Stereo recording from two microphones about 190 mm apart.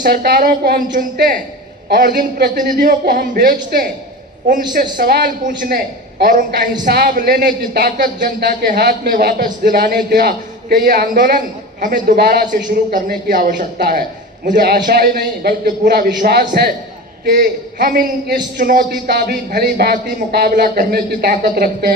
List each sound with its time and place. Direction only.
0.0 s speech: 50° right (ahead or behind)
4.9 s speech: 60° right (ahead or behind)
5.5 s a man's voice: 45° right (ahead or behind)
8.4 s speech: 60° right (ahead or behind)